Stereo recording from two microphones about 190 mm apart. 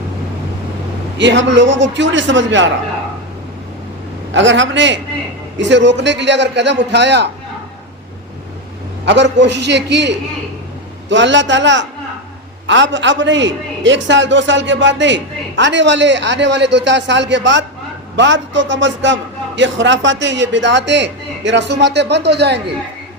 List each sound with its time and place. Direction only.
1.2 s a woman's voice: 70° right (ahead or behind)
4.4 s a woman's voice: 75° right (ahead or behind)
9.0 s a man's voice: 70° right (ahead or behind)